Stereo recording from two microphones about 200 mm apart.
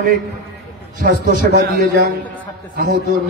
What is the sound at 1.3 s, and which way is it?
A man's voice, 50° right (ahead or behind).